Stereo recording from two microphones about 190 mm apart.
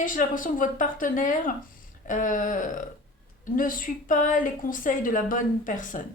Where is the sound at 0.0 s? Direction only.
45° left (ahead or behind).